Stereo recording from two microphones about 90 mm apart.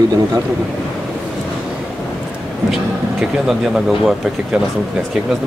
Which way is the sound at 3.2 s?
5° right (ahead or behind).